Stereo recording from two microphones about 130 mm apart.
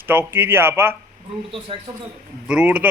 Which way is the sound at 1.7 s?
45° right (ahead or behind).